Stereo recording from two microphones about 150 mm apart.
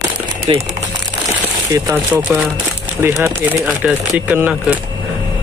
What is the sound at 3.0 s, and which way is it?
Speech, 20° right (ahead or behind).